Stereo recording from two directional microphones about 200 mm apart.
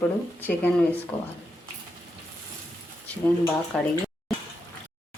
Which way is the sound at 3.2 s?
5° left (ahead or behind).